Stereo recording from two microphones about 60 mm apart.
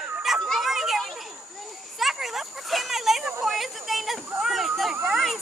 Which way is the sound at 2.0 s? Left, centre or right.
Centre.